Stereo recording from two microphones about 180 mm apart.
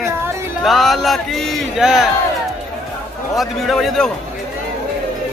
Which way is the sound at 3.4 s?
Centre (ahead or behind).